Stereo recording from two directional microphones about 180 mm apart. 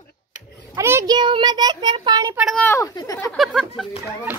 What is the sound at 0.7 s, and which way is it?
A child's voice, 15° right (ahead or behind).